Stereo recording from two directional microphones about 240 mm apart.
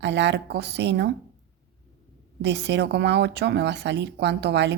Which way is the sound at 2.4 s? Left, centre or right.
Right.